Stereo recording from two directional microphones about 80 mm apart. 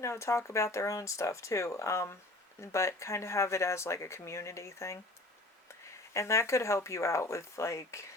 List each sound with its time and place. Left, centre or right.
0.0 s speech: left